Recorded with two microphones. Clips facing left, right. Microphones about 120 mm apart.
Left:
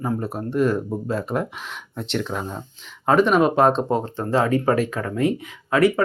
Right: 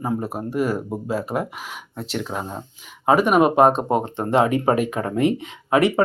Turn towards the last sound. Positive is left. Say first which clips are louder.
# right 1 dB
turn(degrees=-25)  # may be behind; listen again after turning